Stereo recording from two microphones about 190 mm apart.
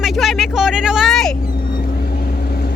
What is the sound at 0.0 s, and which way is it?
Vehicle, centre (ahead or behind).